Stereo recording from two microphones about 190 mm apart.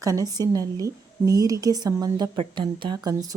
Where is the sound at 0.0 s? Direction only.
20° right (ahead or behind).